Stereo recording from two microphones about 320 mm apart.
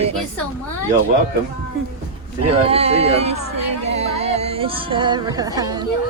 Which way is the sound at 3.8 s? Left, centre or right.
Centre.